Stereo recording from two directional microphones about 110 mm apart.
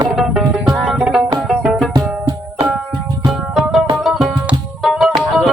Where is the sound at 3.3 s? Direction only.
Centre (ahead or behind).